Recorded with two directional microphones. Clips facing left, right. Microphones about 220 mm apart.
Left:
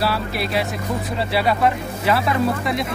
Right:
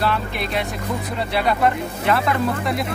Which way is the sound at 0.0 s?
5° left (ahead or behind).